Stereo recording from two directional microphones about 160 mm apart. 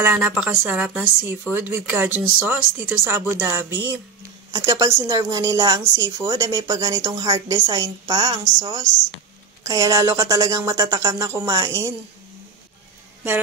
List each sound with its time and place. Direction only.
0.0 s speech: 10° right (ahead or behind)